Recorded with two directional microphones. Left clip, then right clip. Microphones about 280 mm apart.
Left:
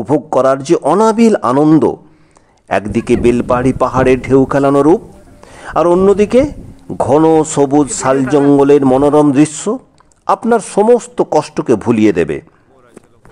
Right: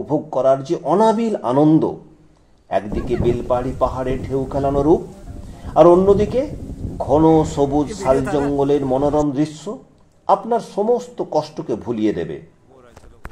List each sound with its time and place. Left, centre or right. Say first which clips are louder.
0.4 s a man's voice: left 5 dB; left
7.2 s a man's voice: left 4 dB; left